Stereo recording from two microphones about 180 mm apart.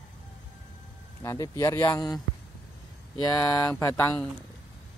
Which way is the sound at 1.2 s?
20° left (ahead or behind).